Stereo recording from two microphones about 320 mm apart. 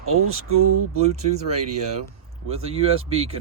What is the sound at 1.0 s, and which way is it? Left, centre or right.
Speech, centre.